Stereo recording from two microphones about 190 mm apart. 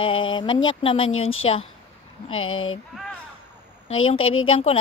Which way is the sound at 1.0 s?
90° left.